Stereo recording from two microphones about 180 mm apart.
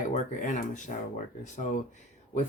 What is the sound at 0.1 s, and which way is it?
Speech, 45° left (ahead or behind).